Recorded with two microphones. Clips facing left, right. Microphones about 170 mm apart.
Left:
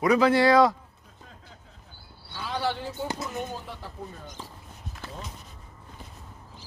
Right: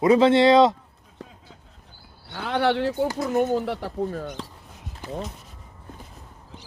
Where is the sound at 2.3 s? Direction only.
70° right (ahead or behind).